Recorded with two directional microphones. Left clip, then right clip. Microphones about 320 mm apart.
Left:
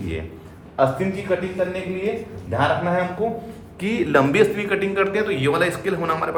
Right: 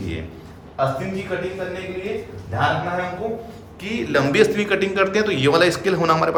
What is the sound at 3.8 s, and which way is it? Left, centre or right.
A man's voice, centre.